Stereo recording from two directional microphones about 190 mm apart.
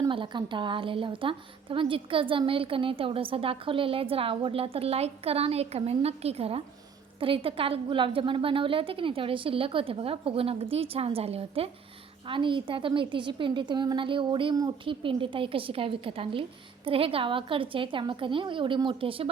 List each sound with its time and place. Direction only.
0.0 s a woman's voice: 25° right (ahead or behind)